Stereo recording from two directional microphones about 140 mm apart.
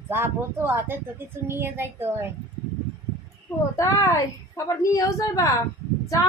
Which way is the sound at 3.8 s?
25° left (ahead or behind).